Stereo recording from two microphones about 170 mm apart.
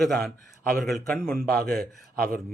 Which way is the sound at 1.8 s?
60° right (ahead or behind).